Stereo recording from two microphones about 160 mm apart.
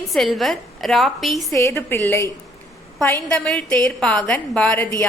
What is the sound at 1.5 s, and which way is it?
A woman's voice, 15° left (ahead or behind).